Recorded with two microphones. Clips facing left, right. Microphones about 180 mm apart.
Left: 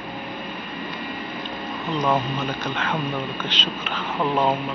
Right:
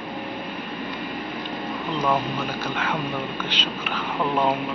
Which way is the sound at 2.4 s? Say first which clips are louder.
Even; 10° right (ahead or behind).